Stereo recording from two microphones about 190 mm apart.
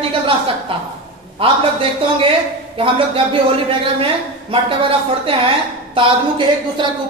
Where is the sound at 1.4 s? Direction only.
30° right (ahead or behind).